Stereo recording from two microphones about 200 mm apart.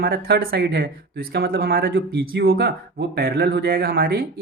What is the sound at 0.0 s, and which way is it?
Speech, 50° right (ahead or behind).